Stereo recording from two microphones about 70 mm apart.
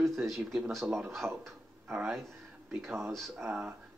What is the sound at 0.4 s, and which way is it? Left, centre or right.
Speech, centre.